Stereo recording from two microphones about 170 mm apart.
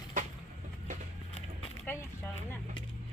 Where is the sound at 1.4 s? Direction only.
40° left (ahead or behind).